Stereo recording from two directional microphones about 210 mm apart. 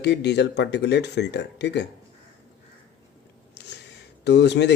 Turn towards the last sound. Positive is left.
turn(degrees=55)  # may be behind; listen again after turning